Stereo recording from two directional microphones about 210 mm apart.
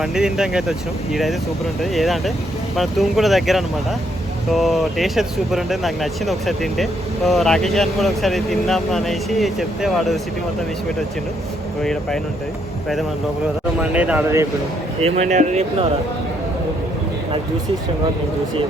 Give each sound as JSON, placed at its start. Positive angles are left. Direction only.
{"t": 0.0, "sound": "speech", "side_deg": 0}
{"t": 11.8, "sound": "speech", "side_deg": 0}
{"t": 13.9, "sound": "speech", "side_deg": -5}
{"t": 15.0, "sound": "speech", "side_deg": -30}